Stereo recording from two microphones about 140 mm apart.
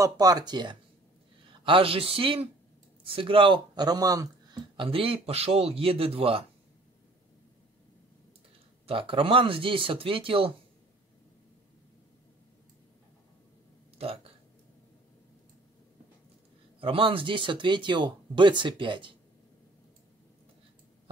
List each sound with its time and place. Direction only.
0.0 s speech: 25° right (ahead or behind); by 6.4 s 40° right (ahead or behind)
8.8 s speech: 40° right (ahead or behind)
13.9 s a sound: 45° right (ahead or behind)
16.8 s speech: 40° right (ahead or behind)